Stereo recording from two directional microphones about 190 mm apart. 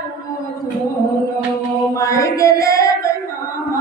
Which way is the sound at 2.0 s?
15° left (ahead or behind).